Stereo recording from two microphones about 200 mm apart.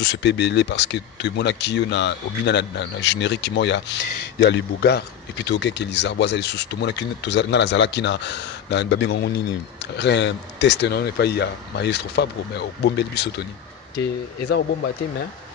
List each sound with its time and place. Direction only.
0.0 s speech: 60° left (ahead or behind)